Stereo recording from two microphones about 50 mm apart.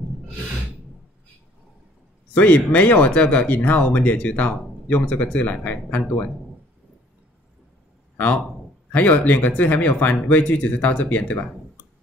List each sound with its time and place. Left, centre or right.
2.3 s speech: left
8.9 s speech: left